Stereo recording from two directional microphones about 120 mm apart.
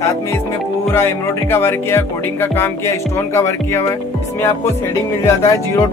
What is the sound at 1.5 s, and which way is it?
Music, 20° left (ahead or behind).